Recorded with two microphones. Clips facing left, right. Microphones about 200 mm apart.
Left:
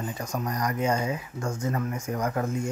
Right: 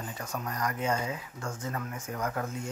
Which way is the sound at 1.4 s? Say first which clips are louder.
Left 8 dB; 40° left (ahead or behind).